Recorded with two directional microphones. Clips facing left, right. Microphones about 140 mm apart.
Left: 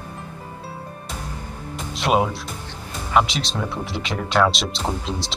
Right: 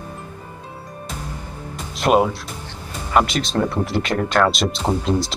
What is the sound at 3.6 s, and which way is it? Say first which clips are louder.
Speech: right 6 dB; centre (ahead or behind).